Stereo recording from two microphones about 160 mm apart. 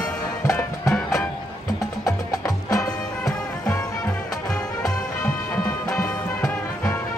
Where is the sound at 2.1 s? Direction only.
20° left (ahead or behind).